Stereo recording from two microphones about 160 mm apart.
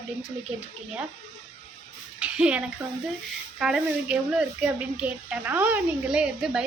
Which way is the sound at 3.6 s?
5° right (ahead or behind).